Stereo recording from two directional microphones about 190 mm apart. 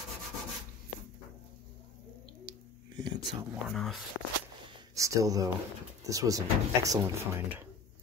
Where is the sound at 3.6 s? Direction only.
Centre (ahead or behind).